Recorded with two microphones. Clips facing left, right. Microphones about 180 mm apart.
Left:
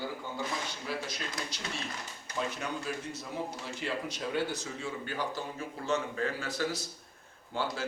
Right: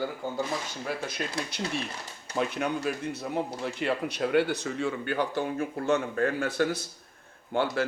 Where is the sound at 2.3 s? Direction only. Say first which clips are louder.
Right 7 dB; 60° right (ahead or behind).